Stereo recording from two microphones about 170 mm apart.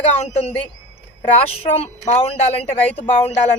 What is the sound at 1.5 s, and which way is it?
Speech, 35° left (ahead or behind).